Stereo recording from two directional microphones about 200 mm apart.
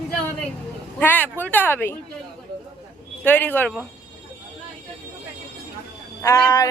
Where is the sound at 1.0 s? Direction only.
10° left (ahead or behind).